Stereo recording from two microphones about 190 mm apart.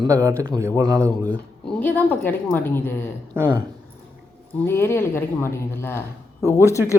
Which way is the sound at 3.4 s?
15° right (ahead or behind).